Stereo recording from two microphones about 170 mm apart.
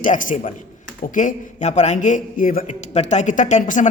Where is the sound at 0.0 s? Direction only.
50° left (ahead or behind).